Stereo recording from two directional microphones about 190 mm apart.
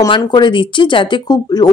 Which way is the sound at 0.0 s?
20° left (ahead or behind).